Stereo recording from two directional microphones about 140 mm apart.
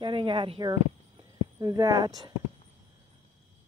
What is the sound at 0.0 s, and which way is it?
Speech, 35° right (ahead or behind).